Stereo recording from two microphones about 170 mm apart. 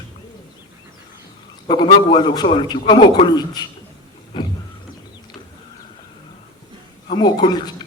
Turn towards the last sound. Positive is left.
turn(degrees=25)  # may be behind; listen again after turning